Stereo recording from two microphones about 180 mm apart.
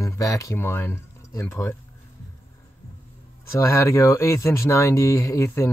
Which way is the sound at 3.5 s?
15° left (ahead or behind).